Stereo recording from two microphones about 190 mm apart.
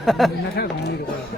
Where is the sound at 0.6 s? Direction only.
60° left (ahead or behind).